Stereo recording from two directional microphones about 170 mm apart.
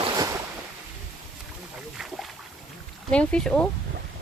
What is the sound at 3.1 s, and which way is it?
Speech, 5° left (ahead or behind).